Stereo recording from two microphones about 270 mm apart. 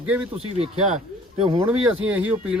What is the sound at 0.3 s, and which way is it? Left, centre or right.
Speech, right.